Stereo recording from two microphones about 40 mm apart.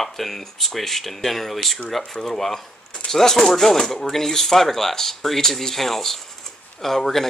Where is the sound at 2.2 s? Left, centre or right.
Centre.